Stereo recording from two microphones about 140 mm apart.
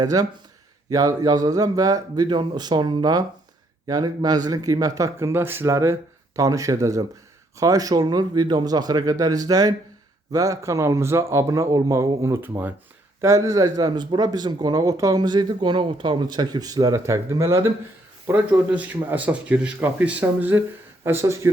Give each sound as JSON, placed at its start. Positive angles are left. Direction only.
{"t": 0.0, "sound": "speech", "side_deg": -25}